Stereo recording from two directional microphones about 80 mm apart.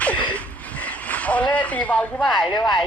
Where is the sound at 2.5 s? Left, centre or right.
Left.